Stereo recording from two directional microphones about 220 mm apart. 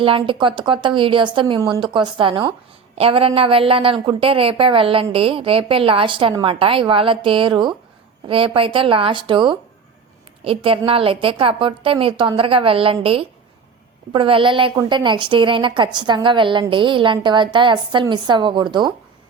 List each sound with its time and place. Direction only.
0.0 s a woman's voice: 25° right (ahead or behind)